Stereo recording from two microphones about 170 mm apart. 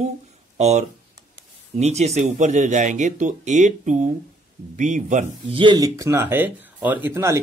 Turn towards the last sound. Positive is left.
turn(degrees=-15)  # may be behind; listen again after turning